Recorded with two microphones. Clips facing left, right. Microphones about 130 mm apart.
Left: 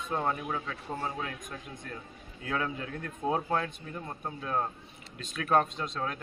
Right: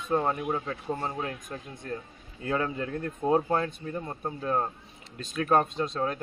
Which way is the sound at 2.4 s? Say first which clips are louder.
Right 4 dB; 30° right (ahead or behind).